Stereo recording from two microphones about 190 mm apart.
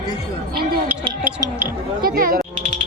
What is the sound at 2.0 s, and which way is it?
Speech, 50° right (ahead or behind).